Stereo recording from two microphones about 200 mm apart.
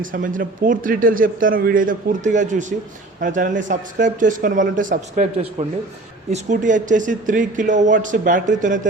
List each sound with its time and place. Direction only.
0.0 s speech: 40° right (ahead or behind)